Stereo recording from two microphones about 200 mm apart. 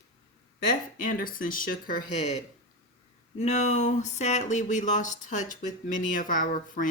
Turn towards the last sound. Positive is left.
turn(degrees=40)  # may be behind; listen again after turning